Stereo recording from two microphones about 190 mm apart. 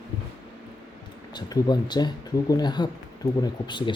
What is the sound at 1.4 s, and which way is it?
Speech, 20° left (ahead or behind).